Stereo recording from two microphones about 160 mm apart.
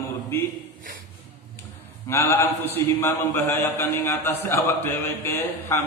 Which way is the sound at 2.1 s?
15° left (ahead or behind).